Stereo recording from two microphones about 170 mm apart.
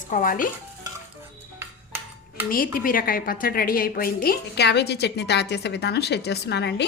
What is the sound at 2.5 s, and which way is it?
A woman's voice, 55° left (ahead or behind).